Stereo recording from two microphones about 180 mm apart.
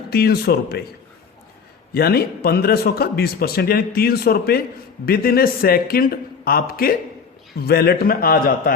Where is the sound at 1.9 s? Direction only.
60° left (ahead or behind).